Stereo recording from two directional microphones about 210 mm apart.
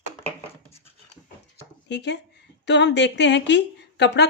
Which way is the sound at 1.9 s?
55° left (ahead or behind).